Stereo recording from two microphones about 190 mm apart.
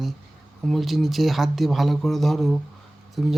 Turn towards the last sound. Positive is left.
turn(degrees=0)  # may be behind; listen again after turning